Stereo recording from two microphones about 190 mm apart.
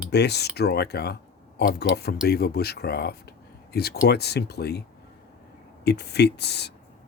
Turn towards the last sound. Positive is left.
turn(degrees=60)  # may be behind; listen again after turning